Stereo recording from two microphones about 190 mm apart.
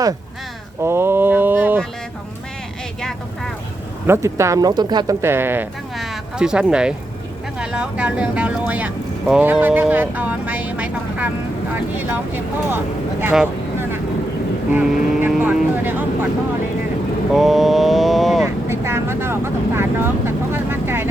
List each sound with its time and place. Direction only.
0.8 s a sound: 15° right (ahead or behind)
3.0 s speech: centre (ahead or behind)
4.0 s speech: 15° right (ahead or behind)
6.0 s a sound: 5° right (ahead or behind)
7.6 s speech: 5° right (ahead or behind)
17.3 s mantra: centre (ahead or behind)
18.4 s speech: 15° right (ahead or behind)